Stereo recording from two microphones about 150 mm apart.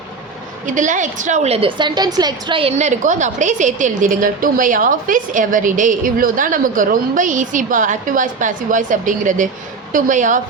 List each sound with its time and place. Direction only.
0.7 s a woman's voice: 55° right (ahead or behind)